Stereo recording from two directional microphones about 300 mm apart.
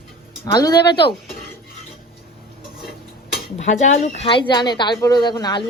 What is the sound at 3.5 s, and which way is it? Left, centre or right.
A woman's voice, left.